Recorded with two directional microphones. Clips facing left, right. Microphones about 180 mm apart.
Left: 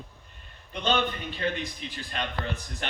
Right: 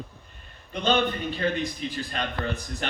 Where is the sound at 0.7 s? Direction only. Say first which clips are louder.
Right 3 dB; 40° right (ahead or behind).